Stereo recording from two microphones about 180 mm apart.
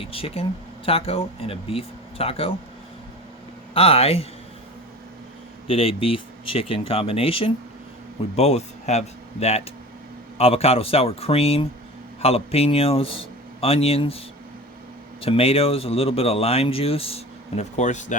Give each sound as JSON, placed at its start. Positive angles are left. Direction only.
{"t": 0.0, "sound": "speech", "side_deg": 30}
{"t": 3.8, "sound": "speech", "side_deg": 35}
{"t": 5.6, "sound": "speech", "side_deg": 30}
{"t": 15.2, "sound": "speech", "side_deg": 30}